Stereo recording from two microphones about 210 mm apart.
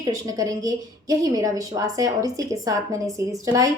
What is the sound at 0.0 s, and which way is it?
A woman's voice, 15° right (ahead or behind).